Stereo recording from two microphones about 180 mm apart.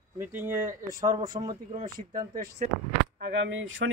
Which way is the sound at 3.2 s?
85° right.